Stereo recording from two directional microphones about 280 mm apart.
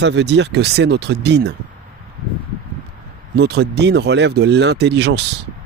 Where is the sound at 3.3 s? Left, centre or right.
Right.